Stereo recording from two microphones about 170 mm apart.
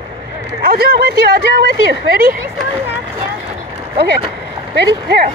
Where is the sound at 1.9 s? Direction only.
60° right (ahead or behind).